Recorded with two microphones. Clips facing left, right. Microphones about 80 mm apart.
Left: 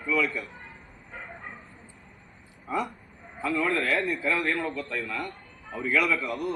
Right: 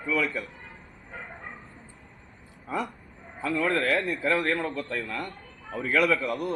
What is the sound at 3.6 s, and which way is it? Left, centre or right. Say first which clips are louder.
Speech: right 2 dB; right.